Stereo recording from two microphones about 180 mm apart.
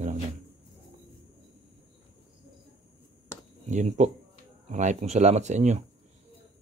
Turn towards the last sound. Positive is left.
turn(degrees=-40)  # may be behind; listen again after turning